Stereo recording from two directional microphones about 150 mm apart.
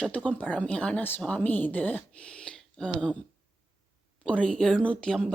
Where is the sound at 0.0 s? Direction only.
5° left (ahead or behind).